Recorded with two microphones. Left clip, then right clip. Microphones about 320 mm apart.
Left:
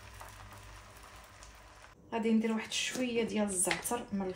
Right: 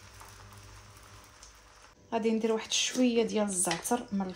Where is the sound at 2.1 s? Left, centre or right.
Right.